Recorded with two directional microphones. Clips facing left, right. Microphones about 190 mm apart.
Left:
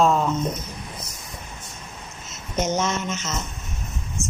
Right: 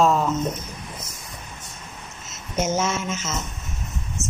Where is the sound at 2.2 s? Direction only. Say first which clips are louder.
Even; 5° right (ahead or behind).